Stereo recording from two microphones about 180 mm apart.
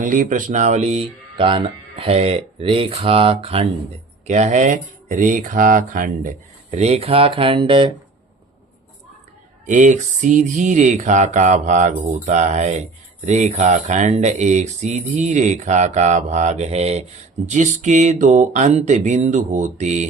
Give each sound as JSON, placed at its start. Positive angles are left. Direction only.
{"t": 0.0, "sound": "speech", "side_deg": -50}
{"t": 9.6, "sound": "music", "side_deg": -45}
{"t": 13.2, "sound": "speech", "side_deg": -40}